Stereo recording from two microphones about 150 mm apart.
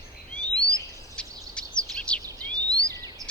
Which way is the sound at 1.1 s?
5° left (ahead or behind).